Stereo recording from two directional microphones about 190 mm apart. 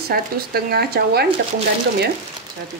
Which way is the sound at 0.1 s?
55° right (ahead or behind).